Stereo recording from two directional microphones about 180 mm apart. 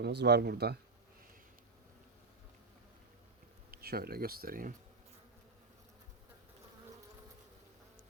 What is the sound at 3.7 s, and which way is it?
Speech, 55° right (ahead or behind).